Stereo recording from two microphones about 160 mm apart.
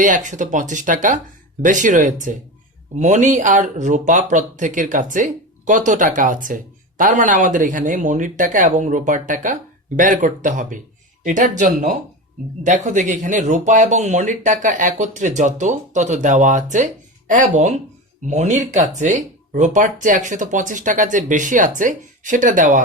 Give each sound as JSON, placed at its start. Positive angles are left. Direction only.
{"t": 0.0, "sound": "speech", "side_deg": -55}